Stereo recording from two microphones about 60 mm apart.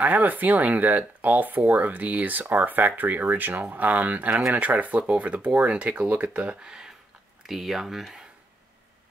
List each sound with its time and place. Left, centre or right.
0.0 s speech: right; by 8.3 s centre